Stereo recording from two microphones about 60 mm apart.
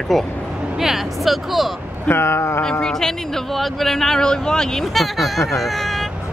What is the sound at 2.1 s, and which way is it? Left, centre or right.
Speech, left.